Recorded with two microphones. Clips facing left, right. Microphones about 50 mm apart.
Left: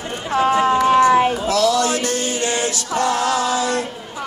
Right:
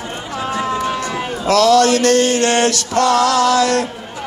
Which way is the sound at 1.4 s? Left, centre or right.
Right.